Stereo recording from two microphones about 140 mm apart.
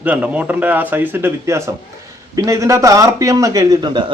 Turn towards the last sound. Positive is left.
turn(degrees=-30)  # may be behind; listen again after turning